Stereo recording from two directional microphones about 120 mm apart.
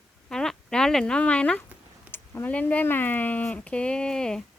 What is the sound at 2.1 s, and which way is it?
Speech, 15° left (ahead or behind).